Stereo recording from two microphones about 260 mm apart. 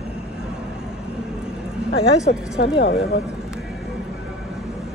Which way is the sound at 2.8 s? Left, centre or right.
Left.